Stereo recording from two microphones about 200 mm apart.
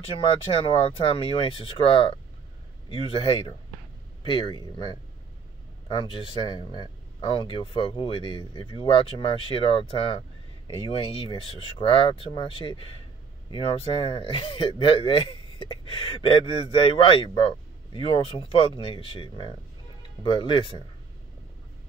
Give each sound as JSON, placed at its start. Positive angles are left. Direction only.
{"t": 0.7, "sound": "speech", "side_deg": 25}